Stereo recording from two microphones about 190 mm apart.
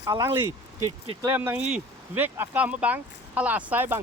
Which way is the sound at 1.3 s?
10° right (ahead or behind).